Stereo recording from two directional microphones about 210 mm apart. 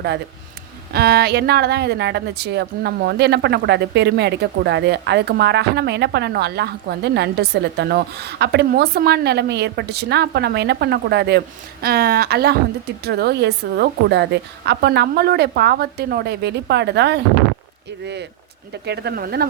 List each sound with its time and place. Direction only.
0.9 s speech: 50° right (ahead or behind)